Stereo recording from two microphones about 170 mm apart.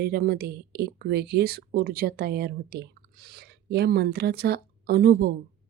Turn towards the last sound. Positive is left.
turn(degrees=-65)  # may be behind; listen again after turning